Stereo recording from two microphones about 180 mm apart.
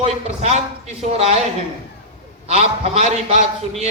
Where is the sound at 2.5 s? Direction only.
35° right (ahead or behind).